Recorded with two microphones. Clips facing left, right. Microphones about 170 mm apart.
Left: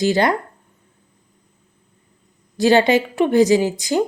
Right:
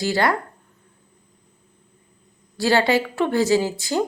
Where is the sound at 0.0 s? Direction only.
20° left (ahead or behind).